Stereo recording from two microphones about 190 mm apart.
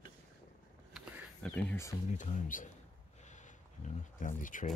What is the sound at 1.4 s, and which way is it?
Speech, 10° left (ahead or behind).